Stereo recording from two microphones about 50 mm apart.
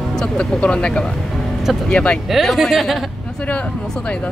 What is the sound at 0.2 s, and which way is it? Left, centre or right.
Speech, left.